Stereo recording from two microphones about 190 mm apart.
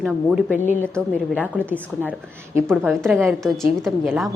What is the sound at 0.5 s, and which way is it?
Speech, 40° left (ahead or behind).